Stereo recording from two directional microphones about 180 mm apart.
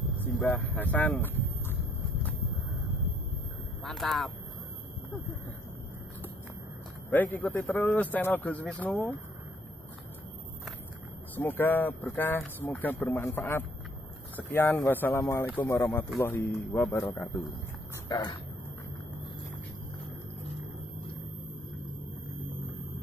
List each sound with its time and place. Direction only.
0.2 s speech: 10° left (ahead or behind)
3.8 s speech: centre (ahead or behind)
7.1 s speech: 10° left (ahead or behind)
11.3 s speech: 10° left (ahead or behind)
18.0 s speech: 25° left (ahead or behind)